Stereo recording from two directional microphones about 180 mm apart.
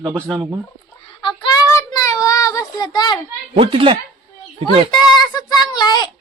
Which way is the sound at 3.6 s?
30° right (ahead or behind).